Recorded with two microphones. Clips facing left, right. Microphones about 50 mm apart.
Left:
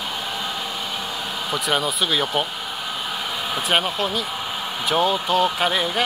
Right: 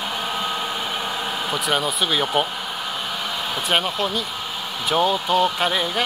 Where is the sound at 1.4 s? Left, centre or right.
Centre.